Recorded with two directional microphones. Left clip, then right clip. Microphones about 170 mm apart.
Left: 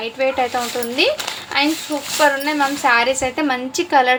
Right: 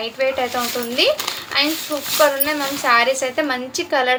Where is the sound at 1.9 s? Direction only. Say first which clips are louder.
Left 1 dB; 10° left (ahead or behind).